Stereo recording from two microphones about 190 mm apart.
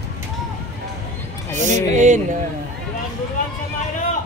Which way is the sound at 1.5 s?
40° right (ahead or behind).